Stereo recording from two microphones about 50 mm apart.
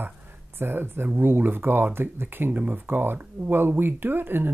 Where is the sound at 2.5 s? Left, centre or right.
Right.